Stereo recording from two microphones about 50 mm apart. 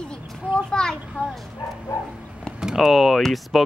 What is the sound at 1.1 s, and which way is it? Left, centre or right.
Speech, centre.